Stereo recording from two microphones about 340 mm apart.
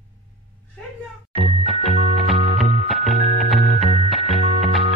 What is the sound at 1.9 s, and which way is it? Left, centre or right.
Music, left.